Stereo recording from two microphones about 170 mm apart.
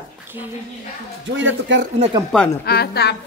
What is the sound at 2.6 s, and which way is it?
Speech, 70° left (ahead or behind).